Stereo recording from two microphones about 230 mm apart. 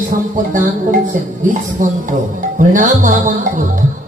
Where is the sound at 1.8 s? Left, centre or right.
Right.